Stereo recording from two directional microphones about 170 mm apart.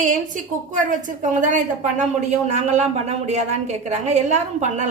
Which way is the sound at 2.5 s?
40° right (ahead or behind).